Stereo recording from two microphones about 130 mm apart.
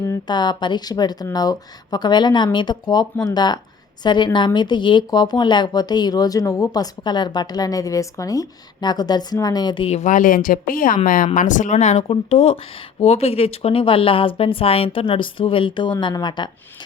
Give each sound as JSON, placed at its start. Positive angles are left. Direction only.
{"t": 0.3, "sound": "speech", "side_deg": 35}
{"t": 9.9, "sound": "speech", "side_deg": 75}
{"t": 11.3, "sound": "speech", "side_deg": 75}